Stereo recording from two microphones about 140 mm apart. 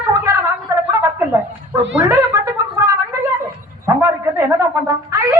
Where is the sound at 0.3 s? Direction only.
20° right (ahead or behind).